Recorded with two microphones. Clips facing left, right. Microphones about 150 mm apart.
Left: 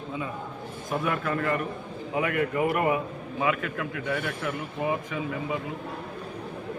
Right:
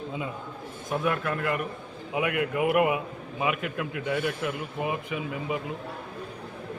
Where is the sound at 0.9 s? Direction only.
Centre (ahead or behind).